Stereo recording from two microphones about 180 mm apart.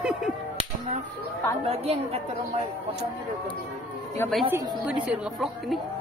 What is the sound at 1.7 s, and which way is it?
Speech, 35° right (ahead or behind).